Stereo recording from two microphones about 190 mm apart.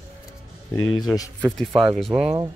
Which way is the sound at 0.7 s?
90° left.